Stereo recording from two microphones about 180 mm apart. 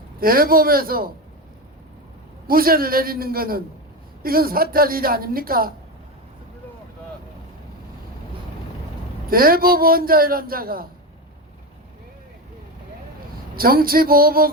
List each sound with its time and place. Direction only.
0.2 s a man's voice: 55° right (ahead or behind)
2.5 s a man's voice: 55° right (ahead or behind)
9.2 s a man's voice: 55° right (ahead or behind)
13.3 s speech: 55° right (ahead or behind)